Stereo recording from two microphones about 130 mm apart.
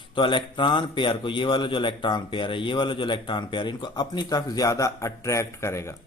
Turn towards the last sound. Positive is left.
turn(degrees=20)  # may be behind; listen again after turning